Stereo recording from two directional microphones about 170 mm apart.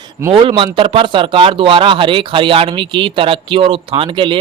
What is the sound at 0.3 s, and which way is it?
Speech, 30° right (ahead or behind).